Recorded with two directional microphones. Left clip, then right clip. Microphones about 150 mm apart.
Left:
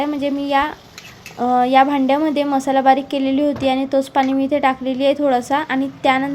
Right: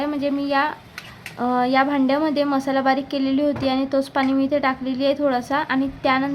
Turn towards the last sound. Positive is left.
turn(degrees=15)  # may be behind; listen again after turning